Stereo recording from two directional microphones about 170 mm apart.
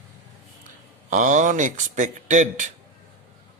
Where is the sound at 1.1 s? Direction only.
50° right (ahead or behind).